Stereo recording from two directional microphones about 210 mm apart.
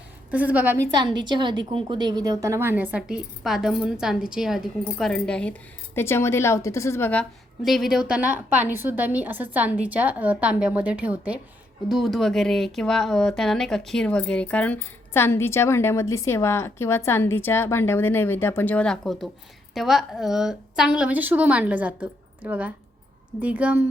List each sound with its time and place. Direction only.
0.3 s a woman's voice: 5° right (ahead or behind)
0.9 s a woman's voice: 20° right (ahead or behind)